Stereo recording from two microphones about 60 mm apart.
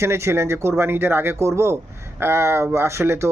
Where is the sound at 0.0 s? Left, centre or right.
Right.